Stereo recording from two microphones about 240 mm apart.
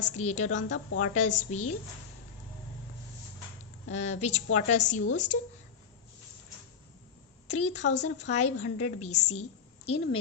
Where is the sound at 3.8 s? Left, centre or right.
Left.